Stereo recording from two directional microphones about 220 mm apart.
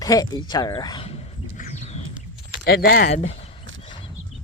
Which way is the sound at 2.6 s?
40° left (ahead or behind).